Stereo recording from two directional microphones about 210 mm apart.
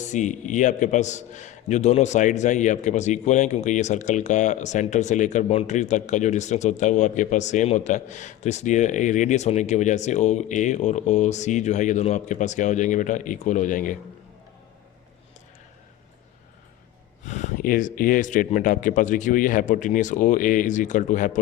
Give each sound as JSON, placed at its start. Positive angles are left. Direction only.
{"t": 0.0, "sound": "a man's voice", "side_deg": 35}
{"t": 17.2, "sound": "a man's voice", "side_deg": 35}